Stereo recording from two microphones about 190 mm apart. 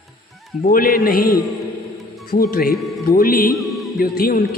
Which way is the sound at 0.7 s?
50° left (ahead or behind).